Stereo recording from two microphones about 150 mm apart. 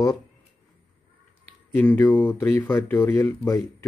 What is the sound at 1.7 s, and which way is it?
Speech, 15° left (ahead or behind).